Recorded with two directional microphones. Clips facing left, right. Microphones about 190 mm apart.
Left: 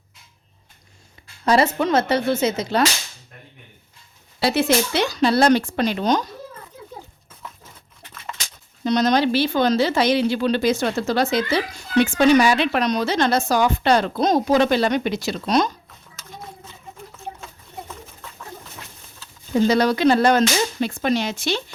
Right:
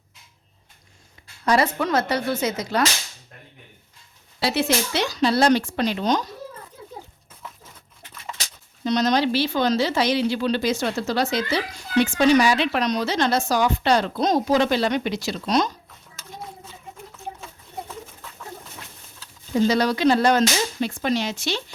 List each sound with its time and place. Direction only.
1.5 s speech: 25° left (ahead or behind)
4.4 s speech: 50° left (ahead or behind)
8.8 s speech: 50° left (ahead or behind)
19.6 s speech: 55° left (ahead or behind)